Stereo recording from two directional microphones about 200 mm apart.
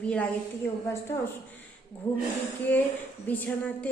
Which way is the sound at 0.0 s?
5° left (ahead or behind).